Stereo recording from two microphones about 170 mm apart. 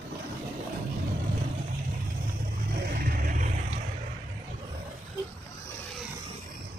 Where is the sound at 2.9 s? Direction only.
60° right (ahead or behind).